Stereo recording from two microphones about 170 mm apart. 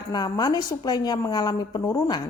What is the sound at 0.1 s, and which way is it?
Speech, 25° left (ahead or behind).